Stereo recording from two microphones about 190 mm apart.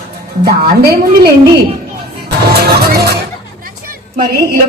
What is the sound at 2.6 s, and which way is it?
Music, 55° right (ahead or behind).